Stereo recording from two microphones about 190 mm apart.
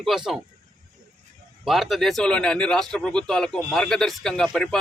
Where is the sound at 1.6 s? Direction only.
Centre (ahead or behind).